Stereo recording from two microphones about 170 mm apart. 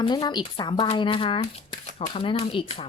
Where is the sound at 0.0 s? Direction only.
25° left (ahead or behind).